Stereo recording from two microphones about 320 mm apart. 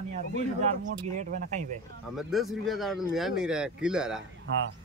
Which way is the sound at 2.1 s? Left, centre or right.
Centre.